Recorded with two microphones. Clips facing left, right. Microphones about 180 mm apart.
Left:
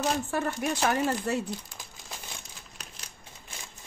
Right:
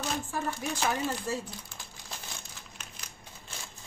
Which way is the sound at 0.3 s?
65° left (ahead or behind).